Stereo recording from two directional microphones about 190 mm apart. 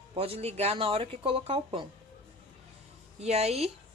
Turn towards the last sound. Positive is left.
turn(degrees=-35)  # may be behind; listen again after turning